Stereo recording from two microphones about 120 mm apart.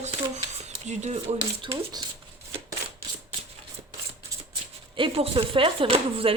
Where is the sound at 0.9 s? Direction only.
70° right (ahead or behind).